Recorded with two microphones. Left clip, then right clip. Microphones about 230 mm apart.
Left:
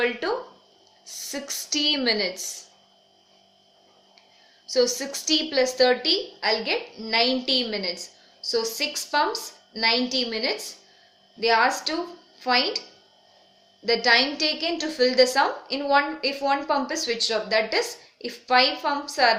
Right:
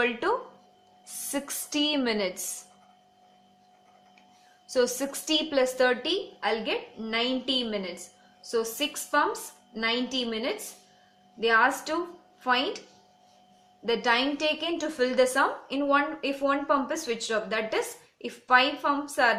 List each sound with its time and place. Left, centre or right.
0.0 s a woman's voice: centre
4.7 s a woman's voice: centre
13.8 s a woman's voice: centre